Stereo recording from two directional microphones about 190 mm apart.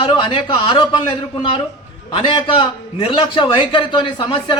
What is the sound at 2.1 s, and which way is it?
A man's voice, 25° left (ahead or behind).